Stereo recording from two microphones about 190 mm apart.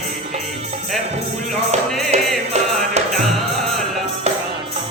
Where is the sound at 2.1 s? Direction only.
35° right (ahead or behind).